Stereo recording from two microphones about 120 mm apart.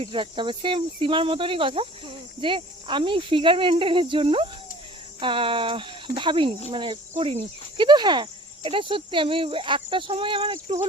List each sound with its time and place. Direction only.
0.0 s cricket: 45° right (ahead or behind)